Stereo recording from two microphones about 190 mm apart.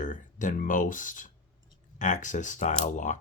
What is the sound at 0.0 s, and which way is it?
Speech, 45° left (ahead or behind).